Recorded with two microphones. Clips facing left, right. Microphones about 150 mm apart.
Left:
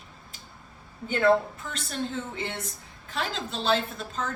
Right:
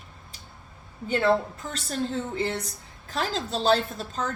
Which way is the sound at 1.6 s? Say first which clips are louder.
Right 3 dB; 35° right (ahead or behind).